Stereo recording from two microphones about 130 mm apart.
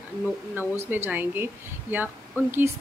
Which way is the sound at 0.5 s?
15° right (ahead or behind).